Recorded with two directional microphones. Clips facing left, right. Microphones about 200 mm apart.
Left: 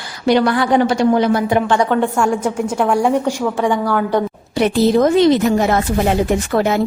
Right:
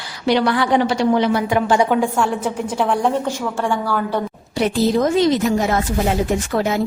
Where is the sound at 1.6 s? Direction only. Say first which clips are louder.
Left 1 dB; 10° right (ahead or behind).